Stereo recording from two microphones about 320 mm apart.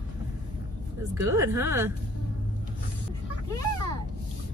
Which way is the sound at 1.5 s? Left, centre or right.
Centre.